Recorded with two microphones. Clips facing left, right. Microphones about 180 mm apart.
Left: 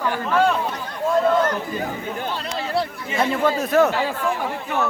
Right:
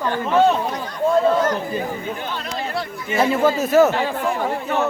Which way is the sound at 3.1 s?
5° right (ahead or behind).